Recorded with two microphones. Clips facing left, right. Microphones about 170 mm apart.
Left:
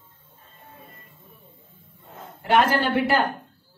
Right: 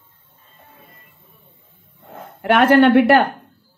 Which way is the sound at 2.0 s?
65° right (ahead or behind).